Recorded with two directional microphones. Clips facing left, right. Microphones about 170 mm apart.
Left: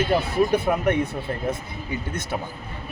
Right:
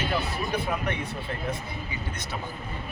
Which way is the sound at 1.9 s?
50° left (ahead or behind).